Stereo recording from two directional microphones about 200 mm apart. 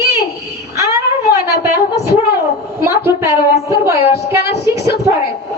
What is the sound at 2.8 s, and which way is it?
Speech, 15° right (ahead or behind).